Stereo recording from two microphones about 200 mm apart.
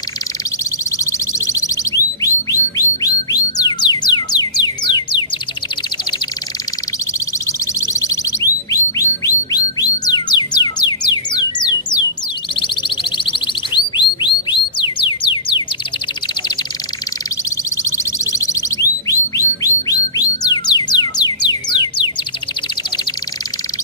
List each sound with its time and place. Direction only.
0.9 s a sound: 15° left (ahead or behind)
7.8 s music: 15° left (ahead or behind)
8.7 s a sound: 15° left (ahead or behind)
9.8 s music: 20° left (ahead or behind)
12.5 s bird: 25° left (ahead or behind)
17.8 s bird: 15° left (ahead or behind)
20.2 s music: 20° left (ahead or behind)